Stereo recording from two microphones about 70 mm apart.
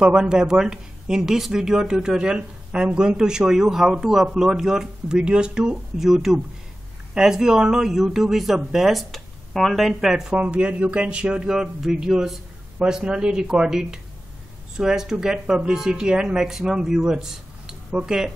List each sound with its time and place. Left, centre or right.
0.0 s speech: centre
10.3 s speech: centre